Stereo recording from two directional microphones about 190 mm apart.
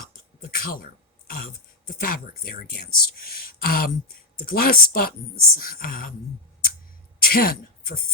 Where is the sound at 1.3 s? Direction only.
50° left (ahead or behind).